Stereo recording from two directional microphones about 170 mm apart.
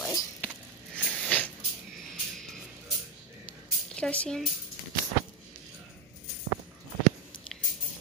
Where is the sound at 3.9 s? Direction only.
5° left (ahead or behind).